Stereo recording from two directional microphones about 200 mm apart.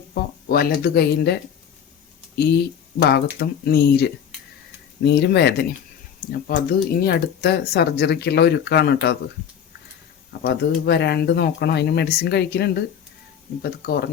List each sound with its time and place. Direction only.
0.1 s speech: 50° left (ahead or behind)
10.4 s speech: 55° left (ahead or behind)